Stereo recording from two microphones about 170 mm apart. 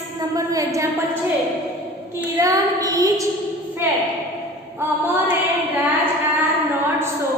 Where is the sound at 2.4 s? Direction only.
20° right (ahead or behind).